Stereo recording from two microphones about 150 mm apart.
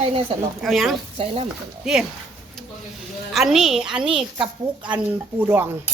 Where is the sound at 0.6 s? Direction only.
Centre (ahead or behind).